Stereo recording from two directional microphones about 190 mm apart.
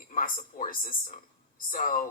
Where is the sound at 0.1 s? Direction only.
45° left (ahead or behind).